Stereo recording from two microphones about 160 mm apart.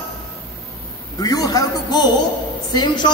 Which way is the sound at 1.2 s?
25° left (ahead or behind).